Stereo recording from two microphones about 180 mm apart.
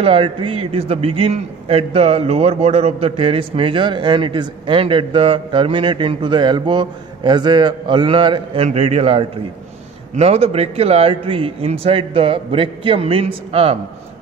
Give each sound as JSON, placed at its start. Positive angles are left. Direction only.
{"t": 0.0, "sound": "a man's voice", "side_deg": -30}